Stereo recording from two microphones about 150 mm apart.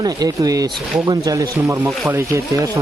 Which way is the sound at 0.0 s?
25° right (ahead or behind).